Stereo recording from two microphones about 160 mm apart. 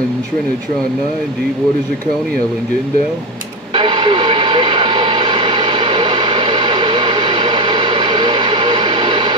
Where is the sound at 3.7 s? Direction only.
30° right (ahead or behind).